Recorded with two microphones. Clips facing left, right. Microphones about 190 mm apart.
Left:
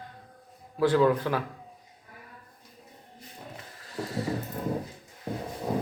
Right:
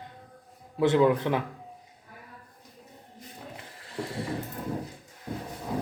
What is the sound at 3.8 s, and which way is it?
Mechanisms, 25° right (ahead or behind).